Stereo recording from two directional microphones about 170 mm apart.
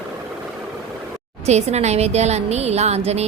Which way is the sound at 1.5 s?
40° right (ahead or behind).